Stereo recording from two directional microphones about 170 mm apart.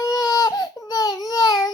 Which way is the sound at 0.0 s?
20° left (ahead or behind).